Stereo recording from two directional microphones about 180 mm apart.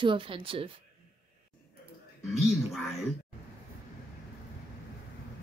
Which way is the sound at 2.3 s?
Centre (ahead or behind).